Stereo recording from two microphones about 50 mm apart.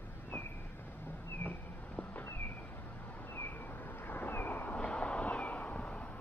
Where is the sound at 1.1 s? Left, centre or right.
Left.